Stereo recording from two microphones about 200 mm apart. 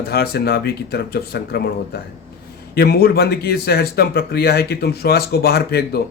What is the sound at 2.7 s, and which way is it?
Speech, 50° left (ahead or behind).